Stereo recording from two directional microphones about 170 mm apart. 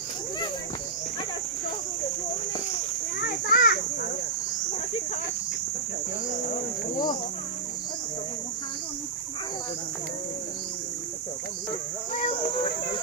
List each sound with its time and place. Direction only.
3.2 s children playing: 70° left (ahead or behind)